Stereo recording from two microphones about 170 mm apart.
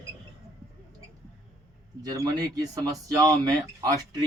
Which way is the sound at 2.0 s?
20° right (ahead or behind).